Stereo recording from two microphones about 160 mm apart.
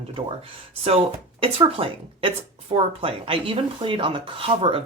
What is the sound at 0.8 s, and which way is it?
Speech, 35° right (ahead or behind).